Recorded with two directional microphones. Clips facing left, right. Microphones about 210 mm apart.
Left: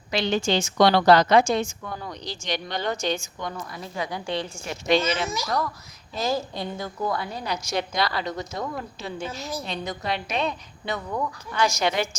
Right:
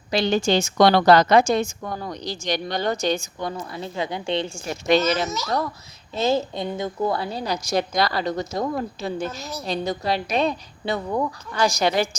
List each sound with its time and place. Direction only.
0.1 s a woman's voice: 40° right (ahead or behind)
4.7 s a woman's voice: 40° right (ahead or behind)